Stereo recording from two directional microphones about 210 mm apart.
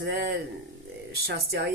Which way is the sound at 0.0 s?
50° right (ahead or behind).